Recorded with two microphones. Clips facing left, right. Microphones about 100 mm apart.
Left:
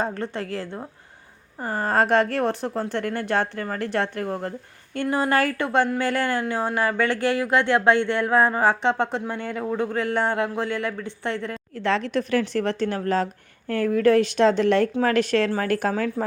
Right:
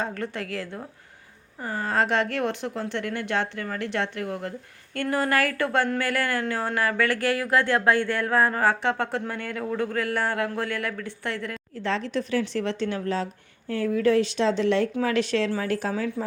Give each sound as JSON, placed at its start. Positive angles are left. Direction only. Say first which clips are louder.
{"t": 0.0, "sound": "speech", "louder": "left 3 dB", "side_deg": 30}
{"t": 1.6, "sound": "speech", "louder": "left 3 dB", "side_deg": 45}
{"t": 4.9, "sound": "speech", "louder": "left 2 dB", "side_deg": 20}
{"t": 11.8, "sound": "a woman's voice", "louder": "left 4 dB", "side_deg": 70}